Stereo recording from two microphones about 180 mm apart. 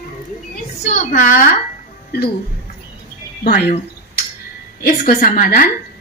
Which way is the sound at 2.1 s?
60° left (ahead or behind).